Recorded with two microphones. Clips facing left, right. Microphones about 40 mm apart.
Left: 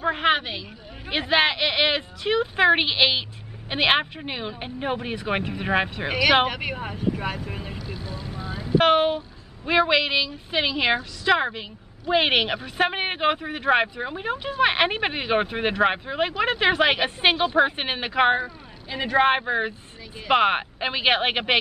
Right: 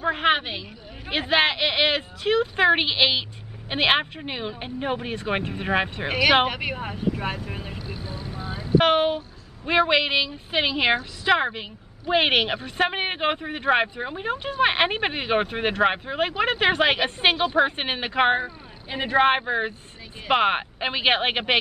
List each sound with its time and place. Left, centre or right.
0.0 s a woman's voice: centre
7.8 s vehicle: right
8.7 s a woman's voice: centre
18.4 s a woman's voice: centre